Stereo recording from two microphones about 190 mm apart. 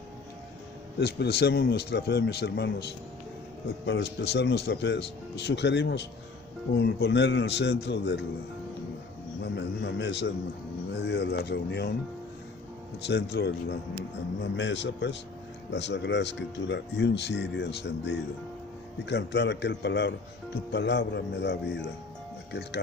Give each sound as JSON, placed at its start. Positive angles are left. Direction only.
{"t": 0.9, "sound": "speech", "side_deg": 60}
{"t": 9.4, "sound": "a sound", "side_deg": 65}
{"t": 11.0, "sound": "speech", "side_deg": 65}
{"t": 13.1, "sound": "a man's voice", "side_deg": 60}